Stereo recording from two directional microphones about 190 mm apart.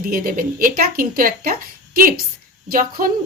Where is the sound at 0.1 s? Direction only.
50° right (ahead or behind).